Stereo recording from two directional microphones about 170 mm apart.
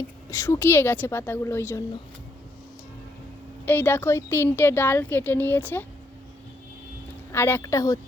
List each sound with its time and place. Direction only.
0.3 s speech: 15° left (ahead or behind)
3.7 s speech: 10° left (ahead or behind)
7.3 s speech: 15° left (ahead or behind)